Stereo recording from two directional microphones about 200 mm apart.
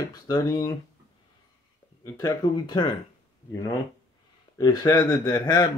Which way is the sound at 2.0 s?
20° left (ahead or behind).